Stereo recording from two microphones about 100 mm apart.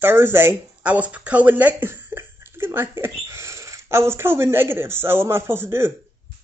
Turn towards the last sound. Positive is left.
turn(degrees=-25)  # may be behind; listen again after turning